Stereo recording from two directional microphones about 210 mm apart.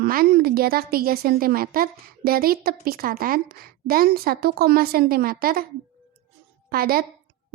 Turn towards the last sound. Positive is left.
turn(degrees=-45)  # may be behind; listen again after turning